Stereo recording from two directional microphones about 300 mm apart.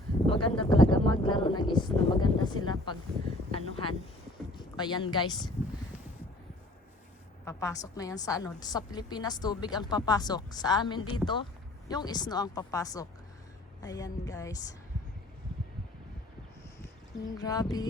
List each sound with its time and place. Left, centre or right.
0.3 s a sound: centre
2.6 s a woman's voice: centre
3.5 s a sound: centre
4.5 s speech: centre
7.4 s a woman's voice: centre
17.3 s a woman's voice: centre